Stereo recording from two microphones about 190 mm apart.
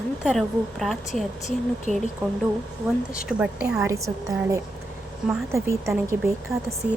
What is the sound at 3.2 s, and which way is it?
Speech, 5° right (ahead or behind).